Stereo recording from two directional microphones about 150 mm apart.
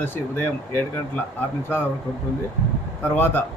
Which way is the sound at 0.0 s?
15° left (ahead or behind).